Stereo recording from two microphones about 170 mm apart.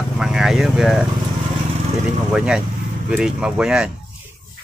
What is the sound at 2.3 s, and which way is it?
Speech, 5° right (ahead or behind).